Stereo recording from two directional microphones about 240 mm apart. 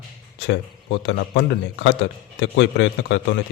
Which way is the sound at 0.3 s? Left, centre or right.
Left.